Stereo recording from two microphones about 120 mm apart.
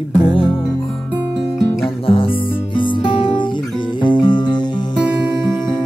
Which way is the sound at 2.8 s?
40° left (ahead or behind).